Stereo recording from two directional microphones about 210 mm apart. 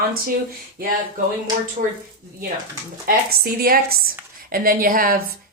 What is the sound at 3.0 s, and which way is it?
A woman's voice, 45° right (ahead or behind).